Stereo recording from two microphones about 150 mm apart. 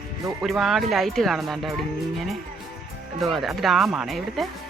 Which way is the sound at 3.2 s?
Centre (ahead or behind).